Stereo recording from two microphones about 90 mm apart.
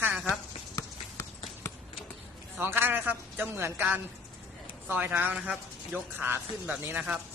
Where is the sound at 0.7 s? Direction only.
35° left (ahead or behind).